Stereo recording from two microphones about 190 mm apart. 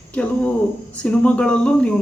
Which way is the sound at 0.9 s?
5° left (ahead or behind).